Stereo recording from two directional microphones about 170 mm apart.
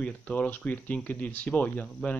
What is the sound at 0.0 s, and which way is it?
Speech, 10° left (ahead or behind).